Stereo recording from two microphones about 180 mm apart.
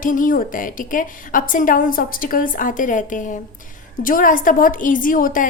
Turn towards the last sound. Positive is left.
turn(degrees=50)  # may be behind; listen again after turning